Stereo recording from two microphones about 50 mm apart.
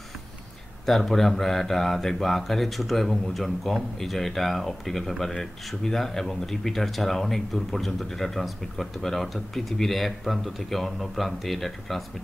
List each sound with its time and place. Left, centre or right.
0.8 s speech: centre